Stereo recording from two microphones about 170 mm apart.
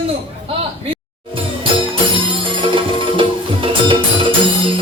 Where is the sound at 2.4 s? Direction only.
30° right (ahead or behind).